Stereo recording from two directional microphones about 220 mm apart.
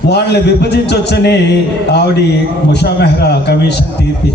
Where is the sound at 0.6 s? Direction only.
50° left (ahead or behind).